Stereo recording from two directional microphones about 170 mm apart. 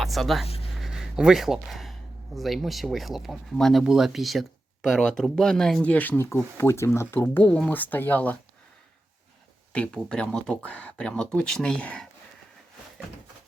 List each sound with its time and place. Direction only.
0.0 s speech: centre (ahead or behind)
0.4 s a sound: 35° left (ahead or behind)
0.8 s speech: 5° right (ahead or behind)
9.7 s speech: 5° left (ahead or behind)